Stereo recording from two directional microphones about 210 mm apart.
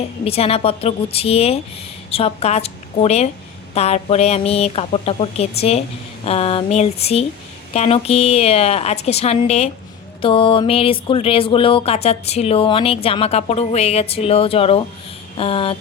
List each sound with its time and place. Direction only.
0.3 s a woman's voice: 30° left (ahead or behind)